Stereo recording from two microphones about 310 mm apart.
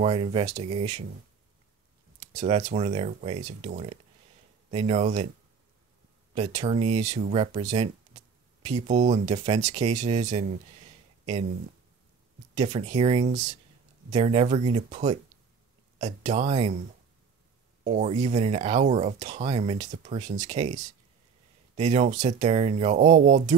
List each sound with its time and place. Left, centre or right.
0.0 s speech: centre
2.1 s speech: right
6.3 s speech: right
12.5 s speech: right
17.8 s speech: right